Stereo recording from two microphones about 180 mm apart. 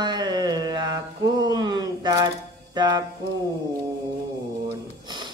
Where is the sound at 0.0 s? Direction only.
25° right (ahead or behind).